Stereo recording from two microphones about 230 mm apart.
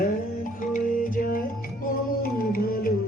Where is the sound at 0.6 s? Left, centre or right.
Left.